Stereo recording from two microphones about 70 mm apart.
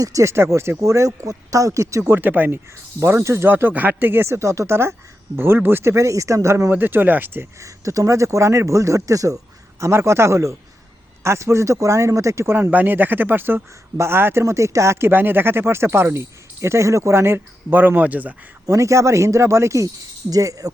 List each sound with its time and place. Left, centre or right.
0.0 s speech: right
2.1 s speech: right
3.0 s speech: right
6.7 s speech: right
7.6 s speech: right
9.8 s speech: right
12.5 s speech: right
18.6 s speech: right